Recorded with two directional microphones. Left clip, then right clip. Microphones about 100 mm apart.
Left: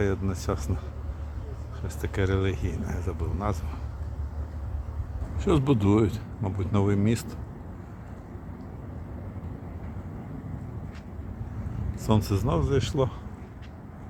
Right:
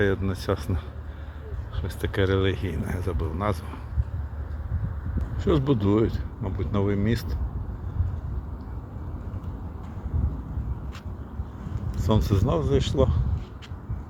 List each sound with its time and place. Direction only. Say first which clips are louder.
0.0 s speech: right 4 dB; 10° right (ahead or behind)
2.0 s speech: right 4 dB; 15° right (ahead or behind)
5.4 s speech: right 1 dB; 15° left (ahead or behind)
11.9 s speech: right 1 dB; 5° left (ahead or behind)